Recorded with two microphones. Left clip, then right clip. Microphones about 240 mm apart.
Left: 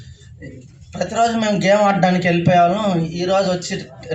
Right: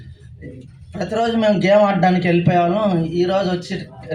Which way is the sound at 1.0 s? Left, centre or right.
Left.